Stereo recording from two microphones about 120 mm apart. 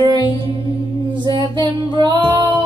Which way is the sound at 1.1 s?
35° right (ahead or behind).